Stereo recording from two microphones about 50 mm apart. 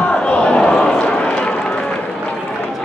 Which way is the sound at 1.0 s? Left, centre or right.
Left.